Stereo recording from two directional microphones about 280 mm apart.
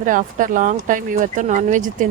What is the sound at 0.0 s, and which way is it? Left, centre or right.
Speech, right.